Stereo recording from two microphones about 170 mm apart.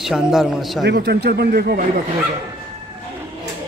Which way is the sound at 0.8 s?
75° right (ahead or behind).